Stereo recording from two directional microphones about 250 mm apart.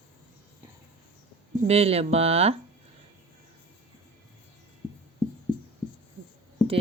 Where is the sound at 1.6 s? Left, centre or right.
Right.